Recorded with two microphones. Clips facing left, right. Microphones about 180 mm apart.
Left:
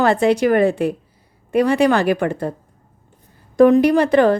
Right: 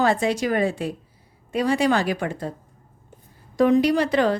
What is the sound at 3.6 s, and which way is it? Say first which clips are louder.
Speech: left 6 dB; 55° left (ahead or behind).